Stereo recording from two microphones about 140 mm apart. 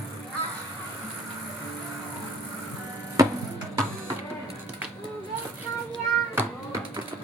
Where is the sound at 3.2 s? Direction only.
25° right (ahead or behind).